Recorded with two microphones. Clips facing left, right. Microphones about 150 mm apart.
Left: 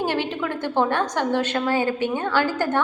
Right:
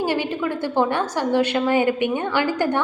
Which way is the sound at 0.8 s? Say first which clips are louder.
Even; 10° right (ahead or behind).